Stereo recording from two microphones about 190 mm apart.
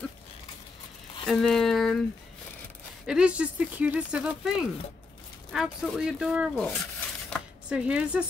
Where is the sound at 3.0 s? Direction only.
5° right (ahead or behind).